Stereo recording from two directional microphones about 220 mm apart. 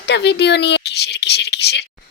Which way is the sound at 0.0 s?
50° left (ahead or behind).